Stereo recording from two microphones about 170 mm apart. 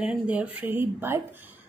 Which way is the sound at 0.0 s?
10° right (ahead or behind).